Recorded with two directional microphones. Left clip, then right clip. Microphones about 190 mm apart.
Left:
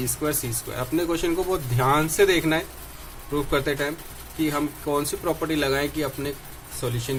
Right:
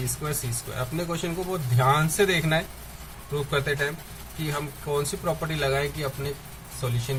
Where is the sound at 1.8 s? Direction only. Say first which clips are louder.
Left 2 dB; 35° left (ahead or behind).